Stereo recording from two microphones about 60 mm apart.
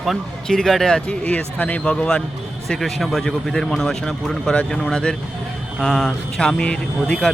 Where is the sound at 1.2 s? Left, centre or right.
Left.